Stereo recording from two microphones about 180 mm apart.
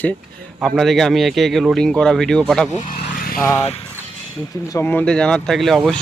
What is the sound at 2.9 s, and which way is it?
Vehicle, 50° left (ahead or behind).